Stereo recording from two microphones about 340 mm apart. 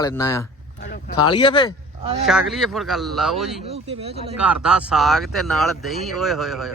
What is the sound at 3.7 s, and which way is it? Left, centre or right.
Speech, centre.